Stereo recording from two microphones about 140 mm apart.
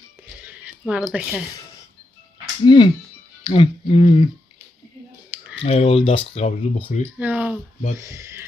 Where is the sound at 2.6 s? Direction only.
30° left (ahead or behind).